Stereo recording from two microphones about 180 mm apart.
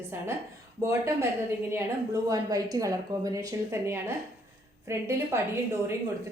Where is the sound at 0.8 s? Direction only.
15° right (ahead or behind).